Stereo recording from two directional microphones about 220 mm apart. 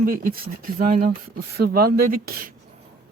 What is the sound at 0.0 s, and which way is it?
Speech, 40° right (ahead or behind).